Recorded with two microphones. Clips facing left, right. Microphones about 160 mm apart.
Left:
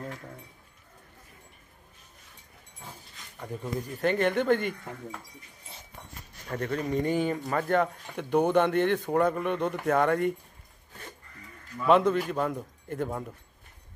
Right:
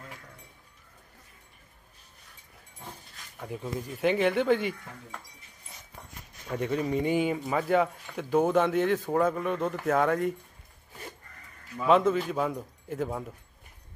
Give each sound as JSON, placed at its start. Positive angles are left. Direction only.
{"t": 3.3, "sound": "speech", "side_deg": -5}
{"t": 6.5, "sound": "speech", "side_deg": -10}
{"t": 11.9, "sound": "speech", "side_deg": -5}